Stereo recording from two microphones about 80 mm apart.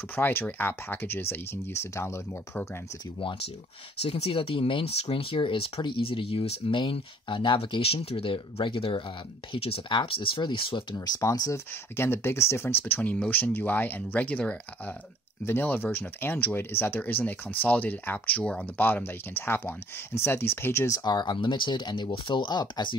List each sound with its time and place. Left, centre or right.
0.1 s speech: left
4.4 s speech: left
11.1 s speech: left
12.0 s speech: left; by 18.9 s centre
18.9 s speech: left
20.9 s speech: left